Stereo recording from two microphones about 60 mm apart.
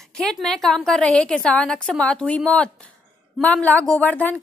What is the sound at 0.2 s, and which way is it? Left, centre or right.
A woman's voice, centre.